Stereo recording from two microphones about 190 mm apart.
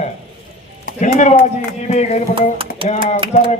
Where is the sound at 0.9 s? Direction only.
40° left (ahead or behind).